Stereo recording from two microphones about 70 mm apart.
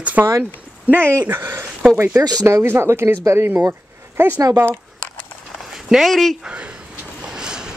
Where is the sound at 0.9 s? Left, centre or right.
Right.